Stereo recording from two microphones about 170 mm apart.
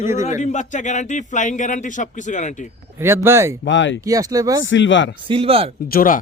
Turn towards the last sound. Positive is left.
turn(degrees=55)  # may be behind; listen again after turning